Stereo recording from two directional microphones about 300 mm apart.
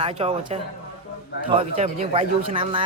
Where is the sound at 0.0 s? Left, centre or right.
Right.